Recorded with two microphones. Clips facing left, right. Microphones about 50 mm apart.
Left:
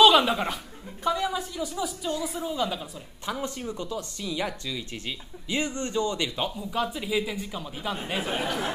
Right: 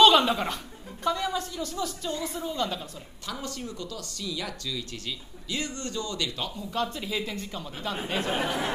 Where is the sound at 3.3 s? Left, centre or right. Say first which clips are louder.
Left 4 dB; left.